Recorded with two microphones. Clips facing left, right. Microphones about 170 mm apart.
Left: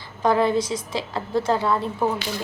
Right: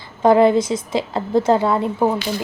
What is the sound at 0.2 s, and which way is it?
A woman's voice, 25° right (ahead or behind).